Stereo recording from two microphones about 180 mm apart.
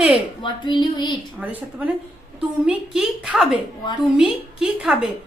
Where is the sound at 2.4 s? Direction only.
5° right (ahead or behind).